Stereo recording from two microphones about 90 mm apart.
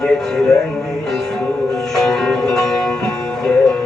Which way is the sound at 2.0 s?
5° left (ahead or behind).